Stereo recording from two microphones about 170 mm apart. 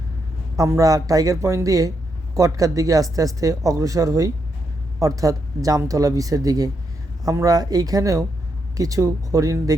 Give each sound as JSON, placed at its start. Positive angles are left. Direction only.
{"t": 0.5, "sound": "speech", "side_deg": -20}